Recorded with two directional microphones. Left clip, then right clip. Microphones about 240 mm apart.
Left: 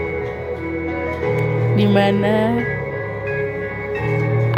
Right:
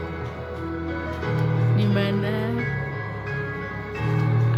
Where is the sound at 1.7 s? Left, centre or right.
Left.